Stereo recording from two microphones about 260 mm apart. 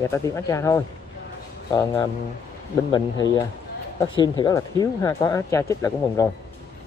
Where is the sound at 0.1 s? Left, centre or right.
Centre.